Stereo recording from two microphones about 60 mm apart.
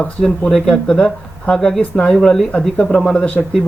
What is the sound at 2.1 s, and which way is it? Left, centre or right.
Speech, centre.